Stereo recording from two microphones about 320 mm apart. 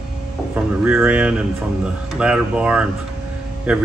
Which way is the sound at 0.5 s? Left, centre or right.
Centre.